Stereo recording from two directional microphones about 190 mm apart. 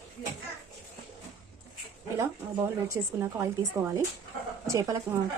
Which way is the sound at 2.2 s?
15° right (ahead or behind).